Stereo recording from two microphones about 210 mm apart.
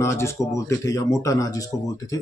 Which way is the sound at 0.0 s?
15° left (ahead or behind).